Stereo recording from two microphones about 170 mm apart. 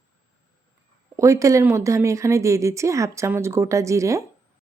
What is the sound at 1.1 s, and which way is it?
A woman's voice, 20° right (ahead or behind).